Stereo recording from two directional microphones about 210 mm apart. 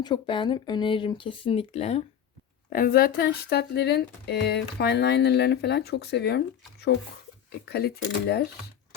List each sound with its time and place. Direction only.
0.0 s speech: 20° left (ahead or behind)
2.6 s speech: 40° left (ahead or behind)
7.6 s speech: 50° left (ahead or behind)